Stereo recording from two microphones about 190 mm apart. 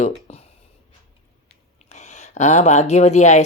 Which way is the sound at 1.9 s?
40° left (ahead or behind).